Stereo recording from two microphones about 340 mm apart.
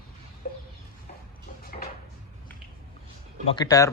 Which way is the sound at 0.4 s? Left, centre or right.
Left.